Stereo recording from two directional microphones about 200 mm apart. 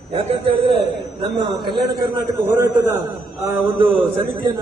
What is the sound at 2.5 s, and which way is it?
A man's voice, 10° right (ahead or behind).